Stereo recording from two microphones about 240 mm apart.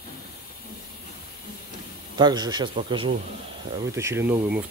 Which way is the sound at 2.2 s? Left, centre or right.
Centre.